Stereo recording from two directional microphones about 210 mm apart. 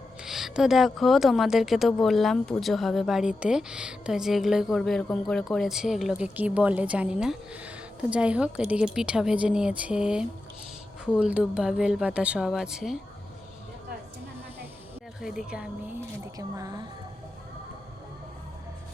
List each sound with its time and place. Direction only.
0.2 s a woman's voice: centre (ahead or behind)
15.2 s a woman's voice: centre (ahead or behind)
16.2 s speech: 15° right (ahead or behind)